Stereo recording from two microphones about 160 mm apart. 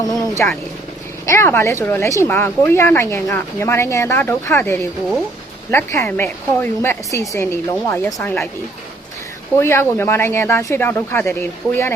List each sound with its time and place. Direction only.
0.0 s a woman's voice: 25° left (ahead or behind)
9.6 s a woman's voice: 15° left (ahead or behind)